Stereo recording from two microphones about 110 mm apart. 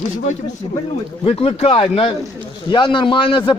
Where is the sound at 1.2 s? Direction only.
60° left (ahead or behind).